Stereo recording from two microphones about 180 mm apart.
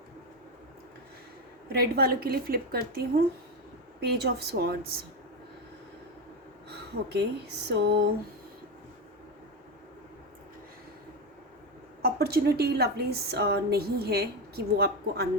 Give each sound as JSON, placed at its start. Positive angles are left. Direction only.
{"t": 1.7, "sound": "a woman's voice", "side_deg": -60}
{"t": 4.0, "sound": "a woman's voice", "side_deg": -65}
{"t": 6.7, "sound": "speech", "side_deg": -65}
{"t": 12.0, "sound": "a woman's voice", "side_deg": -60}